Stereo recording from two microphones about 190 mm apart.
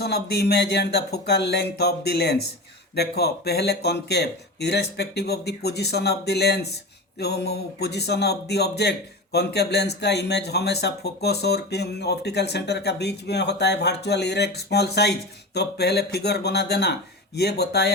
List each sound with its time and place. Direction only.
0.0 s a man's voice: 60° left (ahead or behind)